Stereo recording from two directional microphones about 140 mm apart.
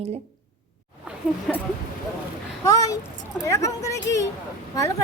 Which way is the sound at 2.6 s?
25° left (ahead or behind).